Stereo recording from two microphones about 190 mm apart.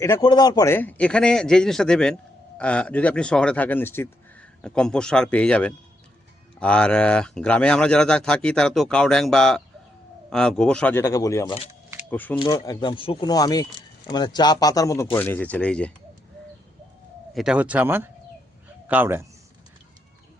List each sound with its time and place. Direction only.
0.0 s speech: 20° left (ahead or behind)
12.4 s speech: 20° left (ahead or behind)
17.3 s speech: 5° right (ahead or behind)